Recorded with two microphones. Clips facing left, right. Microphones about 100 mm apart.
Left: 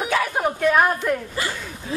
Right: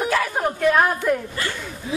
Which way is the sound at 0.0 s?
5° left (ahead or behind).